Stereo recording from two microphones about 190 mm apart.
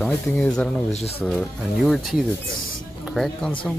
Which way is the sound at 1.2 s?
5° left (ahead or behind).